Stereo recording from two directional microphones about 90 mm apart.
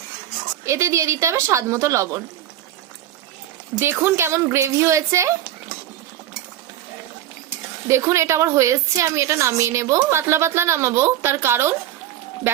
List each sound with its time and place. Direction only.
0.6 s a woman's voice: 30° right (ahead or behind)
3.8 s a woman's voice: 30° right (ahead or behind)
7.9 s a woman's voice: 30° right (ahead or behind)